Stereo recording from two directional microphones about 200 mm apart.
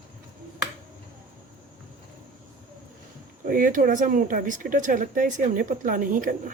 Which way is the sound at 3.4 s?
45° right (ahead or behind).